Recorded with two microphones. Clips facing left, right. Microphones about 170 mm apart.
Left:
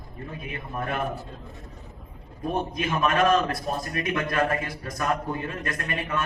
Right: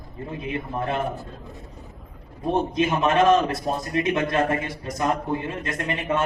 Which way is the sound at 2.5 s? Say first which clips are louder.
Right 6 dB; 25° right (ahead or behind).